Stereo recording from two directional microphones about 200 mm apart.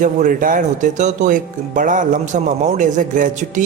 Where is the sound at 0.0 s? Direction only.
40° right (ahead or behind).